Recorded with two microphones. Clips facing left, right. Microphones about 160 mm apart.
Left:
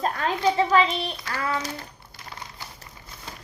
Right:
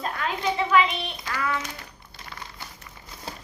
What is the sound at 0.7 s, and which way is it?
A child's voice, 35° left (ahead or behind).